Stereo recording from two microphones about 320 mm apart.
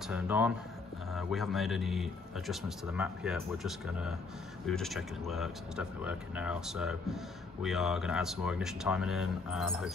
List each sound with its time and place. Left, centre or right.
0.1 s a man's voice: centre